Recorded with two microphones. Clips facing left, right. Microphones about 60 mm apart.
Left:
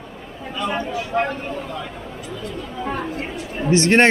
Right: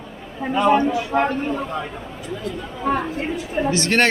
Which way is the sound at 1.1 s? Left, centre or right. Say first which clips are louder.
Right 1 dB; right.